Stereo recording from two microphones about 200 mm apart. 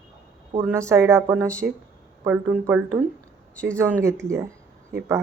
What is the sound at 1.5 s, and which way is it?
Speech, 5° left (ahead or behind).